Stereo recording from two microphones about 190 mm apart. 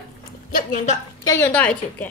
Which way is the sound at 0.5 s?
40° left (ahead or behind).